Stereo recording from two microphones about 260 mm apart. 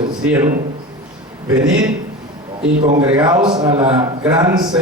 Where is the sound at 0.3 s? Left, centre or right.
Centre.